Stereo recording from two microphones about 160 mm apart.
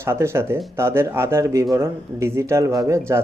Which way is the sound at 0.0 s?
15° right (ahead or behind).